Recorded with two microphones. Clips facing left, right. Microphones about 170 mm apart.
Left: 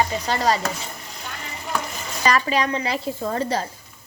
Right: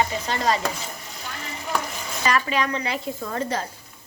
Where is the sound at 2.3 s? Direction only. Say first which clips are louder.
Left 2 dB; 35° left (ahead or behind).